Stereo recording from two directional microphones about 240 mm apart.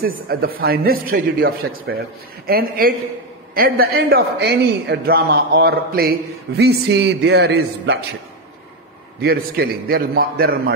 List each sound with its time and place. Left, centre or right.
0.3 s a man's voice: right
9.2 s a man's voice: right